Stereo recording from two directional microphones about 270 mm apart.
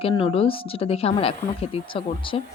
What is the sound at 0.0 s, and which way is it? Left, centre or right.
Speech, centre.